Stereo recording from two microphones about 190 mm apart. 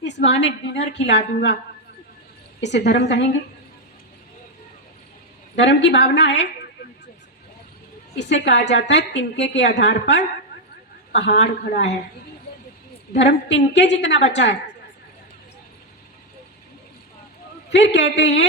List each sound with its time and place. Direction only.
0.0 s a woman's voice: 65° left (ahead or behind)
2.6 s a woman's voice: 65° left (ahead or behind)
5.5 s a woman's voice: 65° left (ahead or behind)
8.2 s a woman's voice: 65° left (ahead or behind)
11.4 s a woman's voice: 45° left (ahead or behind)
13.5 s a woman's voice: 65° left (ahead or behind)
17.7 s a woman's voice: 65° left (ahead or behind)